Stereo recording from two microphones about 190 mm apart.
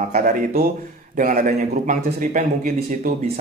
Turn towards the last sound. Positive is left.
turn(degrees=-40)  # may be behind; listen again after turning